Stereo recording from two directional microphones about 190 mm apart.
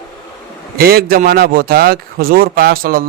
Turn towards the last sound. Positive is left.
turn(degrees=-50)  # may be behind; listen again after turning